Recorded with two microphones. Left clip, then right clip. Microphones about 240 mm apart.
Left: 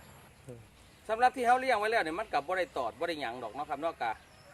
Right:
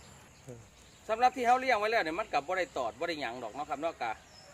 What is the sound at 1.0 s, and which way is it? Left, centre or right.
Speech, centre.